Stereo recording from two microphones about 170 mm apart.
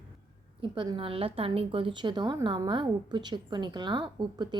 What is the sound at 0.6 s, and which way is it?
A woman's voice, 30° right (ahead or behind).